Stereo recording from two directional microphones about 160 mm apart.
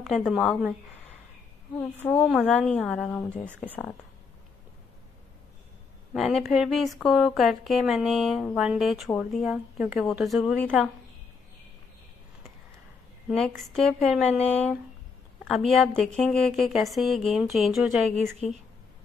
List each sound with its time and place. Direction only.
0.0 s speech: centre (ahead or behind)
2.0 s a woman's voice: 10° left (ahead or behind)
6.1 s speech: centre (ahead or behind)
13.5 s speech: centre (ahead or behind)